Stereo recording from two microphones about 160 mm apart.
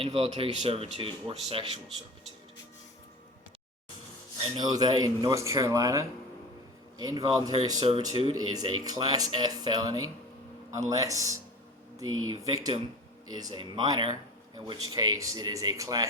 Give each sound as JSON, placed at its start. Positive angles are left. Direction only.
{"t": 0.0, "sound": "speech", "side_deg": -40}
{"t": 4.4, "sound": "speech", "side_deg": -30}